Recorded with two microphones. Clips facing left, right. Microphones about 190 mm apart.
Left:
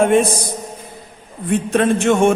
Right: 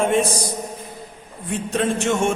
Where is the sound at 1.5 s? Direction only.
60° left (ahead or behind).